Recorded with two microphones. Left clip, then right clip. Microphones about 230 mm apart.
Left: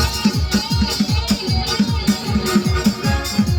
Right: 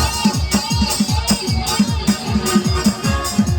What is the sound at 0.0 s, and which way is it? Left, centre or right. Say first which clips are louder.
Music: right 2 dB; right.